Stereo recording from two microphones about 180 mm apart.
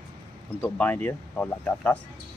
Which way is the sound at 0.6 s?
10° left (ahead or behind).